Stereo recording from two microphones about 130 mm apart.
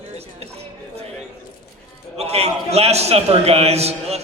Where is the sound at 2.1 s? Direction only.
55° right (ahead or behind).